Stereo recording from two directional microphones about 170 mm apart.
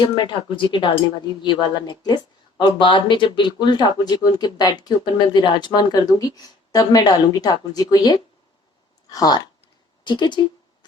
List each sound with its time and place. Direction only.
0.2 s a woman's voice: 25° left (ahead or behind)